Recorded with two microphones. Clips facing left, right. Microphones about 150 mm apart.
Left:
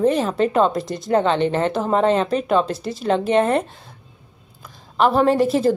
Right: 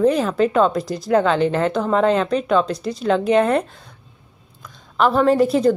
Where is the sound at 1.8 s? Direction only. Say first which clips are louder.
Even; 35° left (ahead or behind).